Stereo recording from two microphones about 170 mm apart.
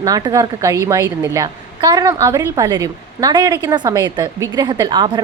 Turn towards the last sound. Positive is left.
turn(degrees=-25)  # may be behind; listen again after turning